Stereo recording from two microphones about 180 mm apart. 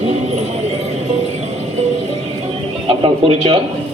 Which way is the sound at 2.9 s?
30° right (ahead or behind).